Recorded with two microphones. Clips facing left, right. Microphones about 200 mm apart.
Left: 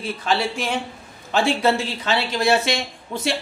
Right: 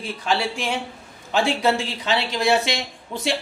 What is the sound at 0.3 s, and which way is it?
Speech, 15° right (ahead or behind).